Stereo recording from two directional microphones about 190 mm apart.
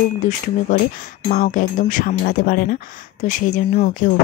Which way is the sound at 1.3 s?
45° left (ahead or behind).